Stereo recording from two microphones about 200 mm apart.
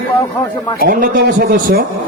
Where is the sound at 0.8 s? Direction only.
45° right (ahead or behind).